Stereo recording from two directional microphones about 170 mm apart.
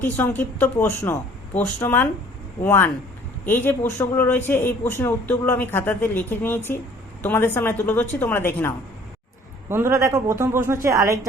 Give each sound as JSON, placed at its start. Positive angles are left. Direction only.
{"t": 0.0, "sound": "speech", "side_deg": 10}
{"t": 9.6, "sound": "a man's voice", "side_deg": -15}